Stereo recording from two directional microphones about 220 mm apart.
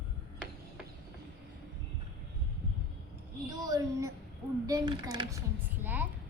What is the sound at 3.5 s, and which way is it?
A child's voice, 15° right (ahead or behind).